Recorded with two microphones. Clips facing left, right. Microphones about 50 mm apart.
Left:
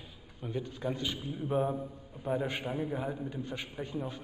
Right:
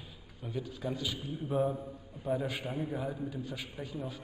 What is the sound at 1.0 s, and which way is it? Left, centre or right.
A man's voice, left.